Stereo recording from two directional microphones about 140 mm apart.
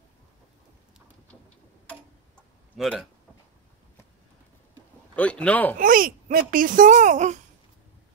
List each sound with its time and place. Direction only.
2.8 s speech: centre (ahead or behind)
5.1 s speech: 10° left (ahead or behind)
5.8 s speech: 85° right; by 7.3 s 60° right (ahead or behind)